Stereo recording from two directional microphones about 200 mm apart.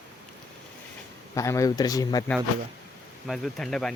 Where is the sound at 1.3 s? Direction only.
15° left (ahead or behind).